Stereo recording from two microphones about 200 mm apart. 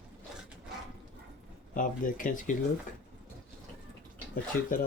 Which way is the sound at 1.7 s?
40° left (ahead or behind).